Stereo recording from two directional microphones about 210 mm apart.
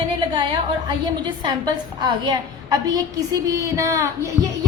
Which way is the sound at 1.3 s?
20° right (ahead or behind).